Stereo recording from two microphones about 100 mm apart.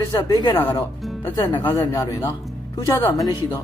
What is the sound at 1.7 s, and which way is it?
Speech, 35° left (ahead or behind).